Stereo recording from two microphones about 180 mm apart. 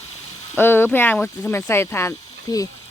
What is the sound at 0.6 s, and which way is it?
Speech, 10° left (ahead or behind).